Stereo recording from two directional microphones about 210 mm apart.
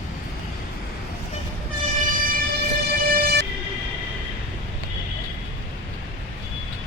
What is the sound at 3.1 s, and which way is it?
Music, 50° right (ahead or behind).